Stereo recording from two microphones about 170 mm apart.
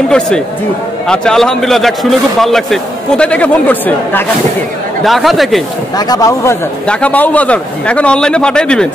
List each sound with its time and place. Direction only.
1.0 s a man's voice: 5° left (ahead or behind)
5.0 s a man's voice: centre (ahead or behind)
5.9 s a man's voice: 20° left (ahead or behind); by 8.8 s 5° left (ahead or behind)